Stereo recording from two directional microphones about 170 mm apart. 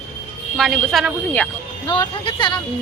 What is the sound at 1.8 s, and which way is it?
Speech, 30° left (ahead or behind).